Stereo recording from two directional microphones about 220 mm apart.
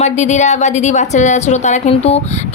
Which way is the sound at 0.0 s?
30° left (ahead or behind).